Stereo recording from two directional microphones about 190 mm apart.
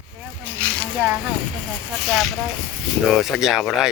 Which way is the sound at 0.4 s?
10° left (ahead or behind).